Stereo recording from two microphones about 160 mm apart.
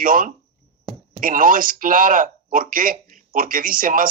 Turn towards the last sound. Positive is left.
turn(degrees=-60)  # may be behind; listen again after turning